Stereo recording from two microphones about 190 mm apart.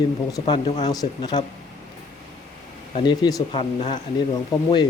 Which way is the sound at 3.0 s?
20° left (ahead or behind).